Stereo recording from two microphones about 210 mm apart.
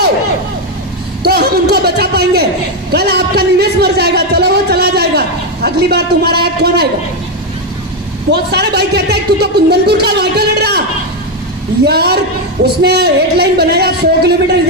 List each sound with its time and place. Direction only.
1.2 s a man's voice: 50° right (ahead or behind)
8.3 s speech: 50° right (ahead or behind)
11.9 s speech: 50° right (ahead or behind)